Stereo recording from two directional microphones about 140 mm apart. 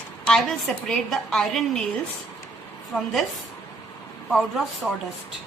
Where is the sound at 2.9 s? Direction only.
Centre (ahead or behind).